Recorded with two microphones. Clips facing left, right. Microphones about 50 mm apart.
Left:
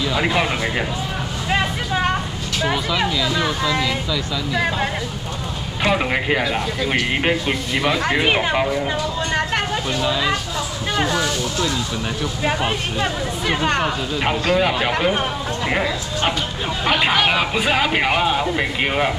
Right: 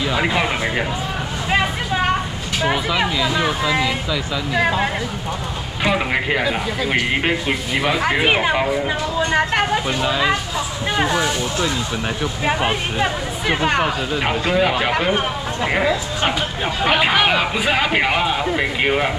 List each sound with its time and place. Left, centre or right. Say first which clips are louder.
0.0 s speech: even; centre
1.5 s vehicle: right 1 dB; centre
2.6 s speech: right 1 dB; centre
5.9 s speech: even; centre